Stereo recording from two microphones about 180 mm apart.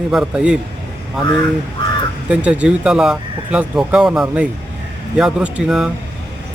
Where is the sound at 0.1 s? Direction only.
5° right (ahead or behind).